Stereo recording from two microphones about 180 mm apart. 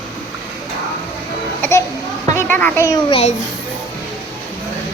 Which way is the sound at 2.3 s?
10° left (ahead or behind).